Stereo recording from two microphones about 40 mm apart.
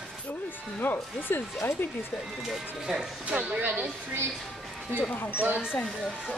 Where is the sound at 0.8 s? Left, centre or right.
Left.